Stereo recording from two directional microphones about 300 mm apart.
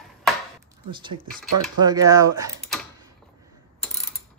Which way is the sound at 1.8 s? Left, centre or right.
Centre.